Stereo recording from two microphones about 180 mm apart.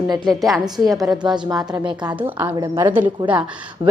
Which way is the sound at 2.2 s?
10° right (ahead or behind).